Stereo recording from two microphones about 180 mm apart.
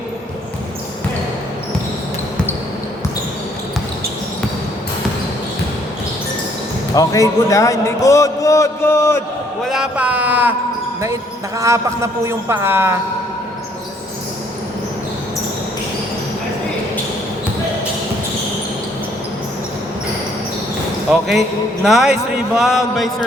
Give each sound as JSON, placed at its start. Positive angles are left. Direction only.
{"t": 6.9, "sound": "a man's voice", "side_deg": 20}
{"t": 9.6, "sound": "a man's voice", "side_deg": -5}
{"t": 21.1, "sound": "a man's voice", "side_deg": 0}